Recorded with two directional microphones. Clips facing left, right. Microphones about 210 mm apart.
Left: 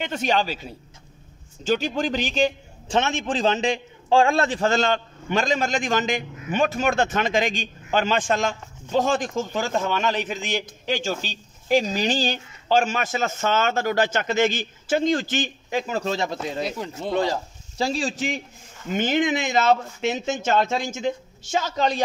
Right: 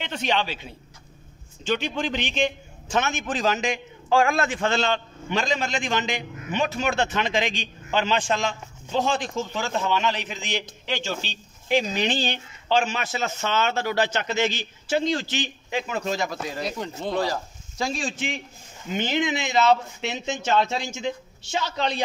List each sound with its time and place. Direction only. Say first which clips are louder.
0.0 s a man's voice: left 3 dB; 45° left (ahead or behind); by 16.6 s 25° left (ahead or behind)
16.6 s speech: left 1 dB; 5° left (ahead or behind)
17.1 s a man's voice: left 3 dB; 25° left (ahead or behind); by 22.0 s 45° left (ahead or behind)